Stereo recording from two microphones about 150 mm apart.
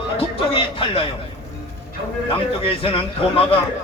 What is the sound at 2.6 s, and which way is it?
Speech, 40° left (ahead or behind).